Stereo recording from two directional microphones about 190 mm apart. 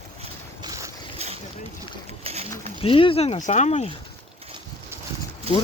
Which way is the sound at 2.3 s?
30° right (ahead or behind).